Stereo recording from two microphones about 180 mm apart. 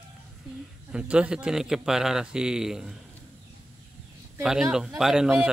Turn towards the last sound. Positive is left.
turn(degrees=-5)  # may be behind; listen again after turning